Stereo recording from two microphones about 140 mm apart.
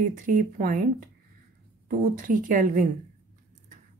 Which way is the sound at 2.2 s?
75° right (ahead or behind).